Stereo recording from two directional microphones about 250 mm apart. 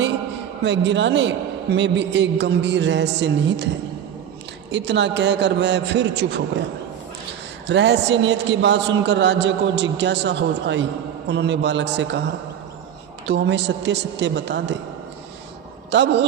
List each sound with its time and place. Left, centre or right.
0.6 s a man's voice: right
4.7 s a man's voice: right
7.7 s a man's voice: right
13.2 s a man's voice: right
15.9 s a man's voice: right